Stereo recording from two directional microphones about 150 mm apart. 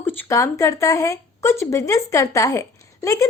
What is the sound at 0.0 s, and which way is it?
A woman's voice, 15° left (ahead or behind).